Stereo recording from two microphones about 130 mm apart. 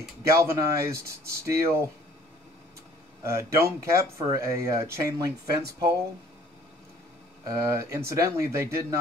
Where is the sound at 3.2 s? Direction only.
20° right (ahead or behind).